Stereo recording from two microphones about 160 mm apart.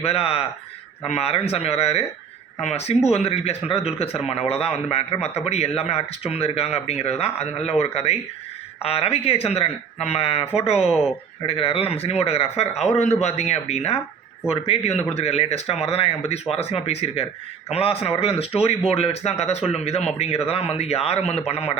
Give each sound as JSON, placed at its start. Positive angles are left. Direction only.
{"t": 0.0, "sound": "speech", "side_deg": 40}